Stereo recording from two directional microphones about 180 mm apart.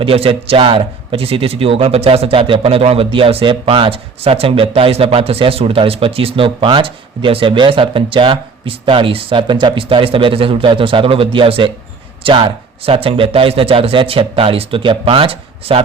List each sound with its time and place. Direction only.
0.0 s a man's voice: 30° right (ahead or behind)